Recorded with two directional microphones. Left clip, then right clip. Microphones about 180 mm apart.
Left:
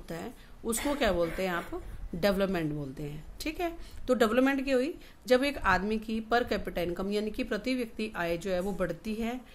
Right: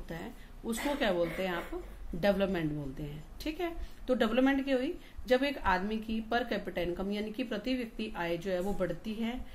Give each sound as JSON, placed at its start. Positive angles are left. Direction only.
{"t": 0.1, "sound": "a woman's voice", "side_deg": 50}